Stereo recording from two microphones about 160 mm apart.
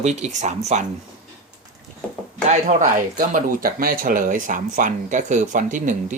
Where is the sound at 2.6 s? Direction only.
60° right (ahead or behind).